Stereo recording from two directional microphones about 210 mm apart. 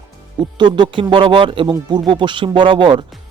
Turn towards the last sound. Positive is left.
turn(degrees=-25)  # may be behind; listen again after turning